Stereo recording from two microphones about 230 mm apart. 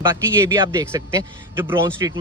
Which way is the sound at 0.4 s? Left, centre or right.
Centre.